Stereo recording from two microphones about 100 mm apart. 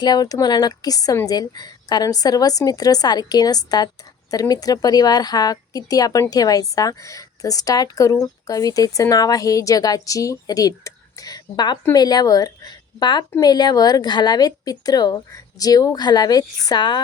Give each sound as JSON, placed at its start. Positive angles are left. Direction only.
{"t": 0.0, "sound": "a woman's voice", "side_deg": 40}